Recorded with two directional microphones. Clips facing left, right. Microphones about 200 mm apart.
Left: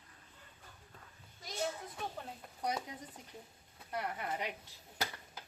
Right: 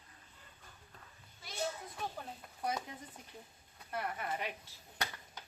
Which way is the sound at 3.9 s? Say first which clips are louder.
Even; 15° left (ahead or behind).